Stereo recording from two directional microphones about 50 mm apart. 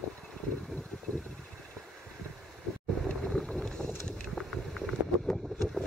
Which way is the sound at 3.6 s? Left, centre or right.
Centre.